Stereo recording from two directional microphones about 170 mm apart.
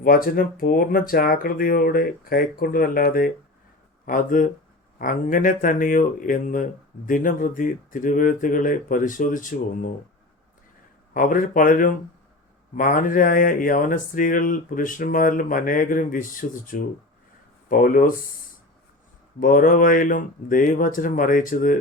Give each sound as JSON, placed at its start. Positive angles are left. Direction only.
{"t": 0.0, "sound": "speech", "side_deg": 60}
{"t": 11.1, "sound": "speech", "side_deg": 55}
{"t": 19.4, "sound": "speech", "side_deg": 55}